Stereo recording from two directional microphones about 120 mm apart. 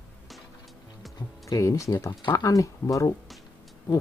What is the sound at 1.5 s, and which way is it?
Speech, 25° left (ahead or behind).